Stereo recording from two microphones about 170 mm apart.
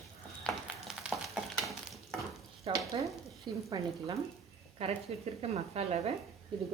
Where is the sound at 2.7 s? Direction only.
30° right (ahead or behind).